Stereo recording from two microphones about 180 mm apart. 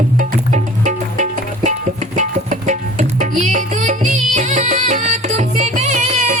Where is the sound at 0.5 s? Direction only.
40° right (ahead or behind).